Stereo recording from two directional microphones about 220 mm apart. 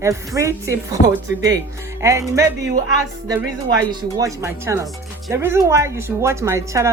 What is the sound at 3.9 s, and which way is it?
Speech, 15° right (ahead or behind).